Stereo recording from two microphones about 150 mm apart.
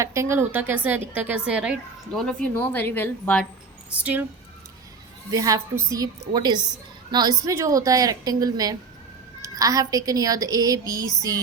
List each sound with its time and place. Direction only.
0.0 s a woman's voice: 20° right (ahead or behind)
2.1 s a woman's voice: 5° left (ahead or behind)
4.0 s a woman's voice: 10° right (ahead or behind)
5.3 s a woman's voice: 25° right (ahead or behind)